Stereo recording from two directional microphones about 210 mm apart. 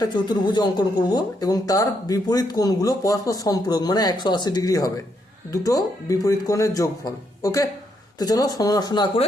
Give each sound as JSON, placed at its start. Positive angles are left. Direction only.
{"t": 0.0, "sound": "speech", "side_deg": 20}